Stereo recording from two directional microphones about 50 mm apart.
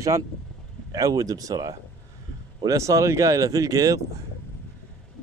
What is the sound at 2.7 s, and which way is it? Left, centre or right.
Speech, right.